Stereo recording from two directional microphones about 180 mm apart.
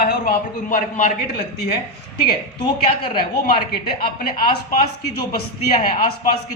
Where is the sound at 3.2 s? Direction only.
55° left (ahead or behind).